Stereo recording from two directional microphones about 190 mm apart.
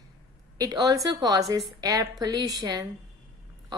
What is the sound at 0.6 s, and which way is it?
A woman's voice, 20° right (ahead or behind).